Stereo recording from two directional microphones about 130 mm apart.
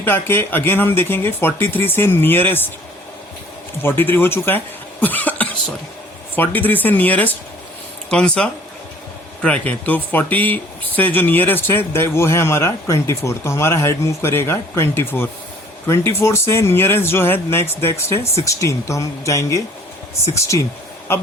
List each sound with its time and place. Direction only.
0.0 s speech: 15° left (ahead or behind)
3.8 s speech: 15° left (ahead or behind)